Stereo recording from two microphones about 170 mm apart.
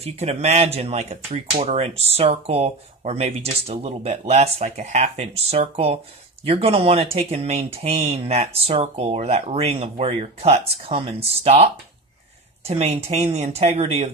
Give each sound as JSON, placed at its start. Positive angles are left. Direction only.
{"t": 0.0, "sound": "speech", "side_deg": -40}
{"t": 12.6, "sound": "speech", "side_deg": -35}